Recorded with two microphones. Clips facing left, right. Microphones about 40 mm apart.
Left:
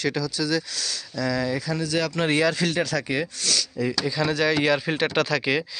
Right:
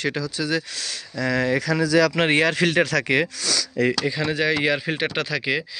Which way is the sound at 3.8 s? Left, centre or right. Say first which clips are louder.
Right 7 dB; right.